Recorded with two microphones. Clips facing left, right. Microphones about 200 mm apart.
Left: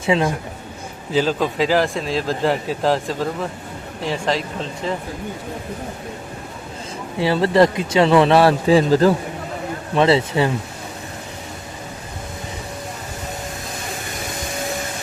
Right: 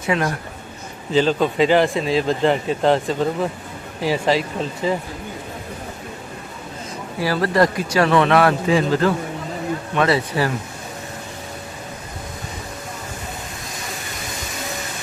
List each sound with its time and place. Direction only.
0.0 s speech: 25° left (ahead or behind)
1.1 s speech: 5° left (ahead or behind)
7.2 s speech: 25° left (ahead or behind)